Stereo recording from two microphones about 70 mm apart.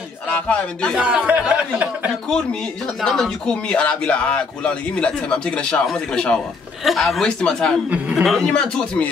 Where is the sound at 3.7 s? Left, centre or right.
Centre.